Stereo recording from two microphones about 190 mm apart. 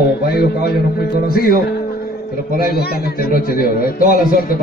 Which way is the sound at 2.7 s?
55° left (ahead or behind).